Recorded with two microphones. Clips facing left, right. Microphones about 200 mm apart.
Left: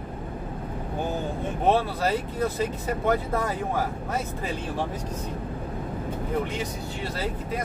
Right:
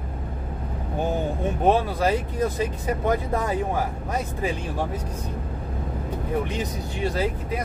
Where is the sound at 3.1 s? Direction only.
15° right (ahead or behind).